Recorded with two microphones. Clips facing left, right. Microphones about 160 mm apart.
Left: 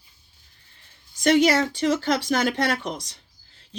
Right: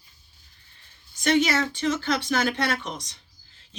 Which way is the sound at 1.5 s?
35° left (ahead or behind).